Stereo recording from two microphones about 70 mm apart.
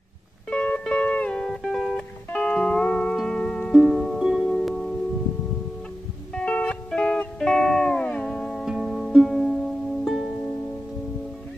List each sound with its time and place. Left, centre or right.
0.5 s music: centre
1.3 s music: centre
2.3 s music: centre
4.2 s music: centre
4.6 s music: centre
6.3 s music: centre
8.6 s music: centre